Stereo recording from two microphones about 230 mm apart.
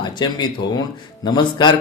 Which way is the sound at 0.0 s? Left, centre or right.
Centre.